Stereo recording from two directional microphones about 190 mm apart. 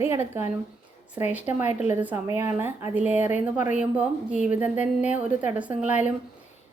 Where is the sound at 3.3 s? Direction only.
40° left (ahead or behind).